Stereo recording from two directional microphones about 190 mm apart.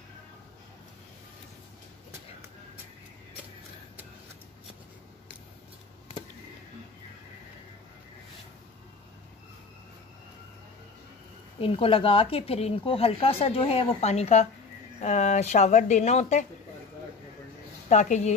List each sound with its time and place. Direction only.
11.6 s speech: 30° left (ahead or behind)
17.8 s a woman's voice: 40° left (ahead or behind)